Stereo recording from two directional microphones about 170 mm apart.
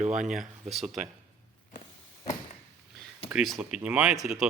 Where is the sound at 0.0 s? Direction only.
50° right (ahead or behind).